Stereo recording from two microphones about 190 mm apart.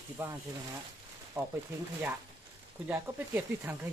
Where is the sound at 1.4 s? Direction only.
20° right (ahead or behind).